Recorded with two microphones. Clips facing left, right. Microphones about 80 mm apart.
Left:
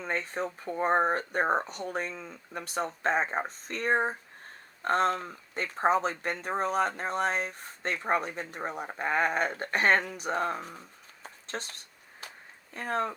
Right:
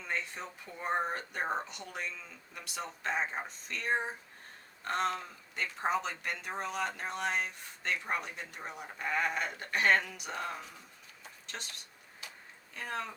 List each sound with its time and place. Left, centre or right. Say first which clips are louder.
0.0 s speech: left 6 dB; left
12.2 s a sound: left 4 dB; left
12.7 s speech: left 8 dB; left